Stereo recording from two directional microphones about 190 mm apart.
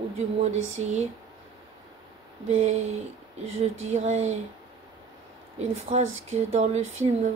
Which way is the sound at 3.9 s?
35° right (ahead or behind).